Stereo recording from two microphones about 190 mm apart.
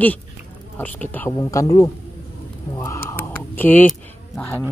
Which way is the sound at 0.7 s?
10° left (ahead or behind).